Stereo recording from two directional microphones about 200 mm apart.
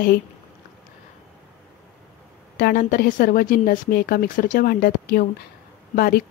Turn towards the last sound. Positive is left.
turn(degrees=50)  # may be behind; listen again after turning